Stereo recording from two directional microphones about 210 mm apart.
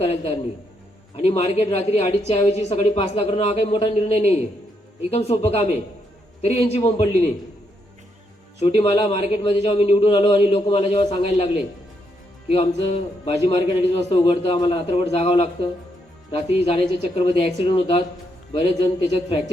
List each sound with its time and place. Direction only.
1.1 s a woman's voice: 30° left (ahead or behind)
8.6 s a woman's voice: 30° left (ahead or behind)
12.5 s a woman's voice: 30° left (ahead or behind)